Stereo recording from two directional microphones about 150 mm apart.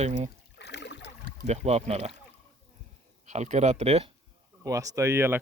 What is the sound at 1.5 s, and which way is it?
Speech, 45° right (ahead or behind).